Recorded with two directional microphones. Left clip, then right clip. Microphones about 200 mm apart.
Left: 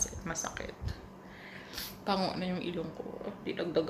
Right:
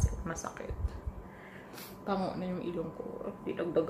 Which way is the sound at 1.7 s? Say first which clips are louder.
Left 2 dB; 5° left (ahead or behind).